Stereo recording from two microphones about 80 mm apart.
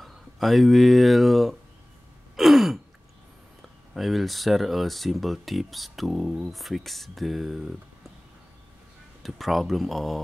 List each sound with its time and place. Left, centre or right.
0.0 s speech: centre
2.3 s gasp: centre
3.9 s speech: centre
9.2 s speech: centre